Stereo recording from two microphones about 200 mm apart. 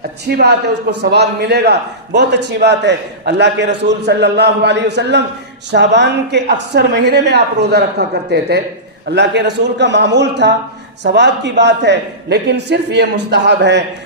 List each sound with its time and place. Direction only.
0.3 s a man's voice: 55° right (ahead or behind)